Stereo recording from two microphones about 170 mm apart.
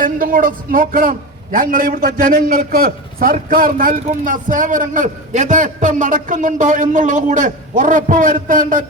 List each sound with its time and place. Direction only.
0.0 s a man's voice: 55° right (ahead or behind)